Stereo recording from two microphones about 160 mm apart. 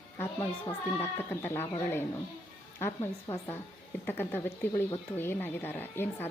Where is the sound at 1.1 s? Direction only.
15° left (ahead or behind).